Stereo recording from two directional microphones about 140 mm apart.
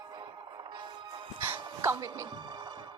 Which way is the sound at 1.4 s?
20° right (ahead or behind).